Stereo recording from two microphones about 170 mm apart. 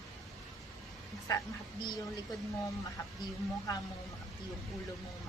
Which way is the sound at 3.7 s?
20° left (ahead or behind).